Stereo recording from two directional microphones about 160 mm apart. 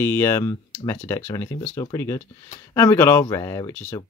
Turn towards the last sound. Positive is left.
turn(degrees=10)  # may be behind; listen again after turning